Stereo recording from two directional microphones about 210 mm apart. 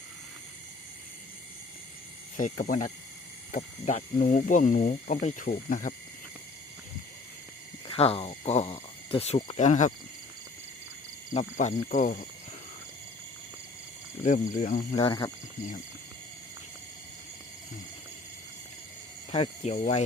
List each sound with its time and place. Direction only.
2.3 s speech: 35° left (ahead or behind)
7.9 s speech: 25° left (ahead or behind)
11.3 s speech: 35° left (ahead or behind)
14.3 s speech: 35° left (ahead or behind)
14.9 s speech: 25° left (ahead or behind)
19.3 s speech: 30° left (ahead or behind)